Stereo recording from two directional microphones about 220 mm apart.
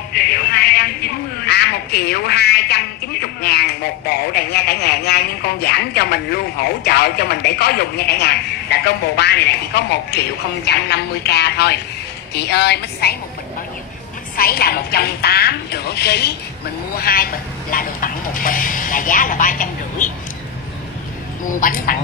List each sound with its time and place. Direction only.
0.3 s a man's voice: 45° left (ahead or behind)
14.3 s a man's voice: 45° left (ahead or behind)
21.5 s speech: 40° left (ahead or behind)